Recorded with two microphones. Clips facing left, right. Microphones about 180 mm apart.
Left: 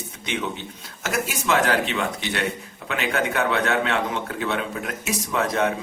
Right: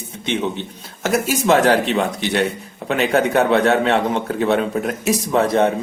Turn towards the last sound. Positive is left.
turn(degrees=-30)  # may be behind; listen again after turning